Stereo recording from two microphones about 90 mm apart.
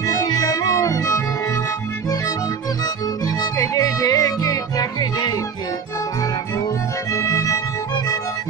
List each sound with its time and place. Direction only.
0.0 s music: 45° left (ahead or behind)
3.3 s music: 40° left (ahead or behind)
7.1 s violin: 35° left (ahead or behind)